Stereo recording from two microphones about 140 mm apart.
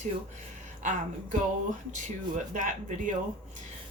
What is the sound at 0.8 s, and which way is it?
Speech, 65° right (ahead or behind).